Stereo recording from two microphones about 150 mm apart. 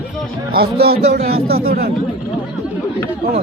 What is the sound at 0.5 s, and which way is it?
Speech, 90° right.